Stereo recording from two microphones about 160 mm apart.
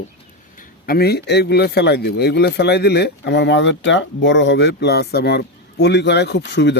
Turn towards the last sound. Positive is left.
turn(degrees=90)